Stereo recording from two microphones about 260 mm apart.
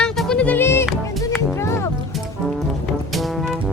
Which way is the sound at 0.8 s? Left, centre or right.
Centre.